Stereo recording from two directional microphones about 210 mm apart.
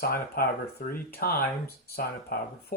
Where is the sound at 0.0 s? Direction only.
45° left (ahead or behind).